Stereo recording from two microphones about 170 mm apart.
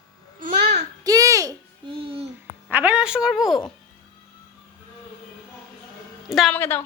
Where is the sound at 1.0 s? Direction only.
20° right (ahead or behind).